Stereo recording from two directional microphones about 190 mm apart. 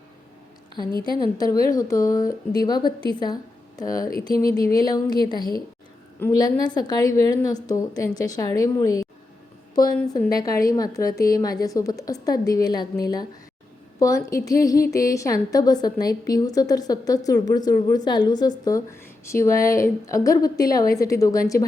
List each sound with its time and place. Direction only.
0.9 s a woman's voice: 25° right (ahead or behind)
1.1 s a woman's voice: 20° left (ahead or behind)
14.4 s a woman's voice: 20° left (ahead or behind)